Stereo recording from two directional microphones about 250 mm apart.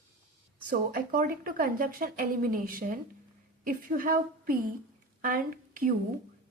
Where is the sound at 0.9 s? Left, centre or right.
Right.